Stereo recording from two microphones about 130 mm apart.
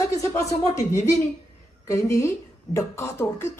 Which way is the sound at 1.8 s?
25° left (ahead or behind).